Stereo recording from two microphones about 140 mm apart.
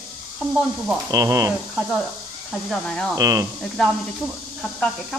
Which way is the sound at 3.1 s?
25° right (ahead or behind).